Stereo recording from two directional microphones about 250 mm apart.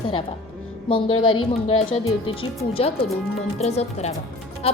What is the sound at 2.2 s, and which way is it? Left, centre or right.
A woman's voice, left.